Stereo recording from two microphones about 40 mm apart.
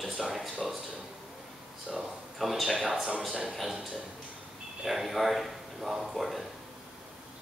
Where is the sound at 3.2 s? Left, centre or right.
Centre.